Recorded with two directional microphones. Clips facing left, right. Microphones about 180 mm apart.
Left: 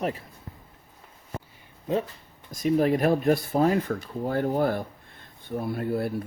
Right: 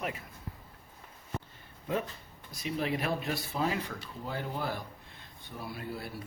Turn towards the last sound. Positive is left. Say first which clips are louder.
# left 12 dB
turn(degrees=55)  # may be behind; listen again after turning